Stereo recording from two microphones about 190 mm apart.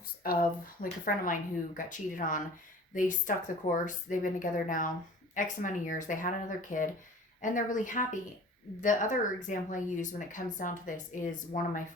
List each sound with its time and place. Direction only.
0.2 s speech: 50° left (ahead or behind)